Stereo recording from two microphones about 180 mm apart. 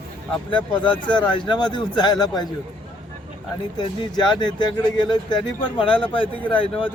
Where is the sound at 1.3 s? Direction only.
25° left (ahead or behind).